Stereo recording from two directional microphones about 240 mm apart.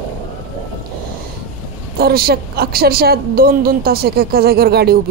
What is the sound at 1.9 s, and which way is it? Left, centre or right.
A woman's voice, right.